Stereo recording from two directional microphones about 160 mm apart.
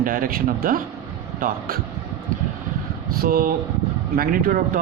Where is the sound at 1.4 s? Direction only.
65° right (ahead or behind).